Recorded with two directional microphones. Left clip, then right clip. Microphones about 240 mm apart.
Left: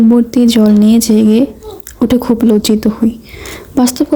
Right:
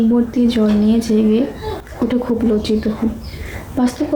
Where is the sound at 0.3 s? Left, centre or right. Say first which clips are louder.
Left 6 dB; left.